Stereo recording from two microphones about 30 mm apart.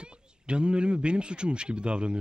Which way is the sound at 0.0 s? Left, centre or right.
Right.